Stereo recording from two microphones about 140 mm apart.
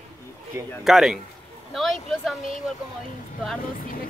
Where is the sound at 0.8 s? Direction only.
Centre (ahead or behind).